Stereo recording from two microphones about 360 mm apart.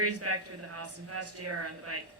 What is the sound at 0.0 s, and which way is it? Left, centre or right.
A man's voice, right.